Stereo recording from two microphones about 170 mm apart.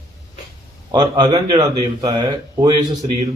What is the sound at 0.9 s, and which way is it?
Speech, 25° right (ahead or behind).